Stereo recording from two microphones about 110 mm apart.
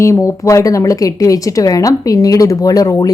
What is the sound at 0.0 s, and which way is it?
A woman's voice, 25° left (ahead or behind).